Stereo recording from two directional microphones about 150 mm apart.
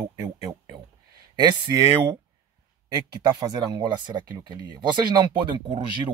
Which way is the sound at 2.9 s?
30° right (ahead or behind).